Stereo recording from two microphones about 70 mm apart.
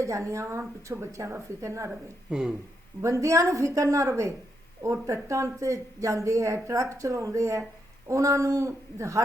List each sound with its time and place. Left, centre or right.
0.0 s a woman's voice: right
2.3 s speech: centre
3.0 s a woman's voice: right